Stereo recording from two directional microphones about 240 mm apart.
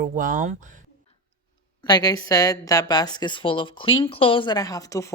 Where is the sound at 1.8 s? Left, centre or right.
Centre.